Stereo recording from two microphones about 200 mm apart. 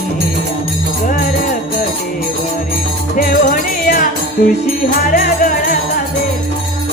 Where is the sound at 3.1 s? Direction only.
45° left (ahead or behind).